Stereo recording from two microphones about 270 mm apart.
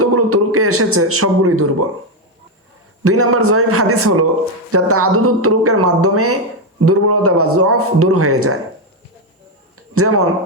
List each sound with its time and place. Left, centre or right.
0.0 s a man's voice: right
3.0 s a man's voice: right
9.7 s a sound: right